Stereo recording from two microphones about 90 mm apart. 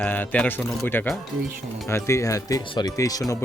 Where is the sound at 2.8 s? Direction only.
40° left (ahead or behind).